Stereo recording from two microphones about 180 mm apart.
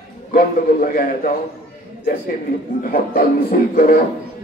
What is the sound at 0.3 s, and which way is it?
A man's voice, 50° left (ahead or behind).